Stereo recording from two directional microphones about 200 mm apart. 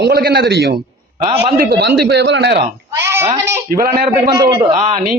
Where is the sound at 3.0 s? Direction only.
15° right (ahead or behind); by 5.0 s 30° right (ahead or behind).